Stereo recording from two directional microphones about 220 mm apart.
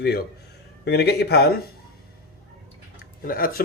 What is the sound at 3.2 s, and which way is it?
Speech, 40° left (ahead or behind).